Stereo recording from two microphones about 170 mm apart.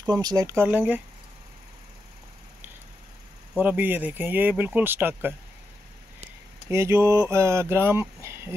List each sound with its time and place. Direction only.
0.1 s speech: 25° right (ahead or behind)
0.7 s speech: 10° right (ahead or behind)
3.5 s speech: 10° right (ahead or behind)
6.7 s speech: 15° right (ahead or behind)